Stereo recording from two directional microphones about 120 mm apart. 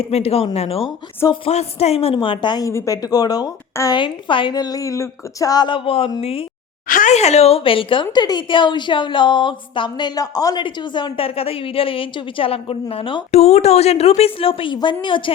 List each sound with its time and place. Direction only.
0.0 s a woman's voice: 55° left (ahead or behind)
2.1 s speech: 40° left (ahead or behind)
2.6 s speech: 25° left (ahead or behind)
4.0 s a woman's voice: 45° left (ahead or behind)
7.0 s a woman's voice: 70° left (ahead or behind); by 13.2 s 50° left (ahead or behind)
13.3 s a woman's voice: 60° left (ahead or behind); by 15.3 s 45° left (ahead or behind)